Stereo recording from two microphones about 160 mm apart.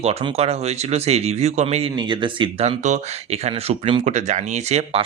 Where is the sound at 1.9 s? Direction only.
30° right (ahead or behind).